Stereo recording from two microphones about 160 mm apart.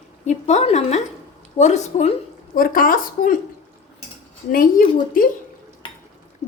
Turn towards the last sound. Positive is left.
turn(degrees=60)  # may be behind; listen again after turning